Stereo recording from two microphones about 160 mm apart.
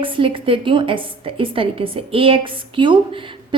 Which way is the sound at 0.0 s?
35° right (ahead or behind).